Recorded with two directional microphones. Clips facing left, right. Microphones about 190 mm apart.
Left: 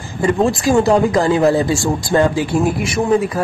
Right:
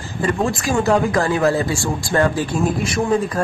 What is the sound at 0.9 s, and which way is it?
Speech, 20° left (ahead or behind).